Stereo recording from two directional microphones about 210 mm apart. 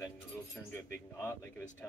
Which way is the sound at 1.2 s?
10° left (ahead or behind).